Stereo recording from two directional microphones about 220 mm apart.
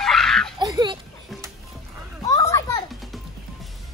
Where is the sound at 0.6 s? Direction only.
20° right (ahead or behind).